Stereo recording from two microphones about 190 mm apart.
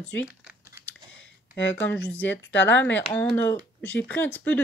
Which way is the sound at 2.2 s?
70° left (ahead or behind).